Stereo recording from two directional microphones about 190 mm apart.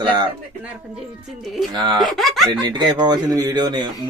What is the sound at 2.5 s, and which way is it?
Speech, 25° right (ahead or behind).